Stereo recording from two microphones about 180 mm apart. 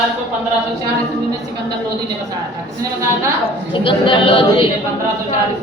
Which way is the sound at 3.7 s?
30° left (ahead or behind).